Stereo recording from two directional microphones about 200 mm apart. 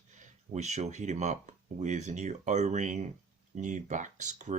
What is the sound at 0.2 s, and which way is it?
Speech, 35° right (ahead or behind).